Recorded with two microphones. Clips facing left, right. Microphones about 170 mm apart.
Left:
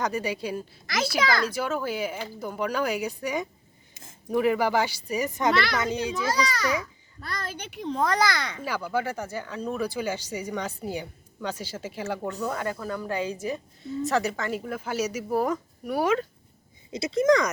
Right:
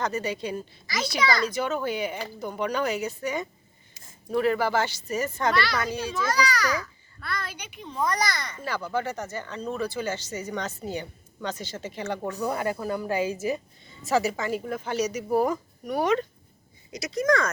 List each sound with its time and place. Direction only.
0.0 s a woman's voice: 10° left (ahead or behind); by 6.7 s 25° left (ahead or behind)
7.2 s a woman's voice: 40° left (ahead or behind)
7.8 s a child's voice: 80° left
8.6 s speech: 10° left (ahead or behind)
12.4 s a woman's voice: 10° right (ahead or behind); by 16.2 s 5° left (ahead or behind)
16.9 s speech: 25° left (ahead or behind)